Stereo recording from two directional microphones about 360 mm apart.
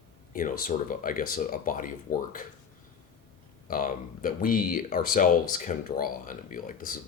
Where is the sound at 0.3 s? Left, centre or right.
Left.